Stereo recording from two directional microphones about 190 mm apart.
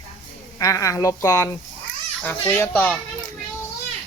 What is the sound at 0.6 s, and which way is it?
Speech, 15° left (ahead or behind).